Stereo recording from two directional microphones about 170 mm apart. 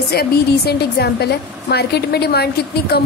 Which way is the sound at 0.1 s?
70° left (ahead or behind).